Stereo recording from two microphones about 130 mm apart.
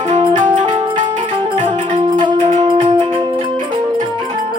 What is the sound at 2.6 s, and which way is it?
Wind instrument, 30° right (ahead or behind).